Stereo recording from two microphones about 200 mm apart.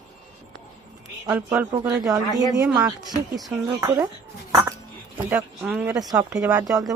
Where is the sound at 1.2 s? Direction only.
15° right (ahead or behind).